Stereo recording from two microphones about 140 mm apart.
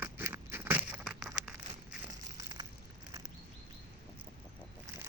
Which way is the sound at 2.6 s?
35° right (ahead or behind).